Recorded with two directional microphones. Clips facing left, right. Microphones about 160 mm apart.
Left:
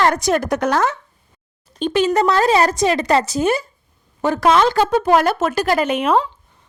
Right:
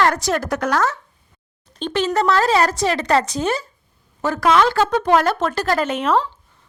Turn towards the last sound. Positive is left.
turn(degrees=15)  # may be behind; listen again after turning